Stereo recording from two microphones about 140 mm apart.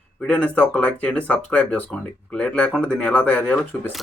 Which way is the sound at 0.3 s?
10° left (ahead or behind).